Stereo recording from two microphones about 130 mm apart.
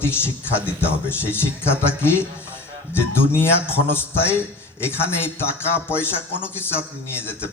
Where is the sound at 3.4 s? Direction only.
15° left (ahead or behind).